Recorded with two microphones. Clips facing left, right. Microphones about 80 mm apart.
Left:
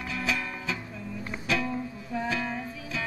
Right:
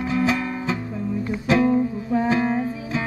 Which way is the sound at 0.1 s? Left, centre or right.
Right.